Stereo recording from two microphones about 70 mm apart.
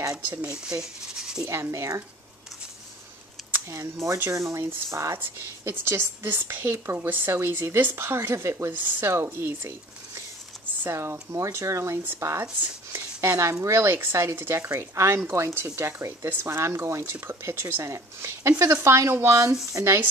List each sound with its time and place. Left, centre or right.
0.3 s speech: centre
1.5 s speech: right
3.7 s speech: right
10.8 s speech: right
12.9 s a sound: right
13.5 s speech: right
13.7 s speech: right